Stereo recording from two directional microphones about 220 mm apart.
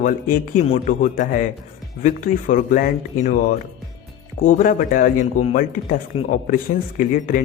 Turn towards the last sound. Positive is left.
turn(degrees=35)  # may be behind; listen again after turning